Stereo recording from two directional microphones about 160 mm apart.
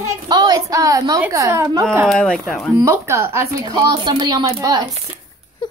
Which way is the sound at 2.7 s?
15° right (ahead or behind).